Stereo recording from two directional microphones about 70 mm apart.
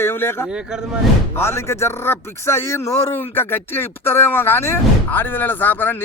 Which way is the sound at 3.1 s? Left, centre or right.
Left.